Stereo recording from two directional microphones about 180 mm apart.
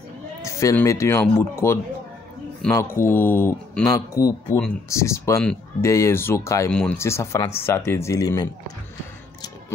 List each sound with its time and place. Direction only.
0.5 s a sound: 15° left (ahead or behind)
0.7 s speech: 15° left (ahead or behind)
6.7 s speech: 5° left (ahead or behind)
7.0 s speech: 15° left (ahead or behind)